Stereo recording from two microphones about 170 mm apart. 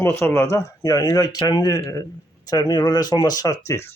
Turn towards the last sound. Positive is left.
turn(degrees=15)  # may be behind; listen again after turning